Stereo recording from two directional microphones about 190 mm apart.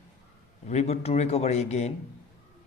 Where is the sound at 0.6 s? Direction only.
35° left (ahead or behind).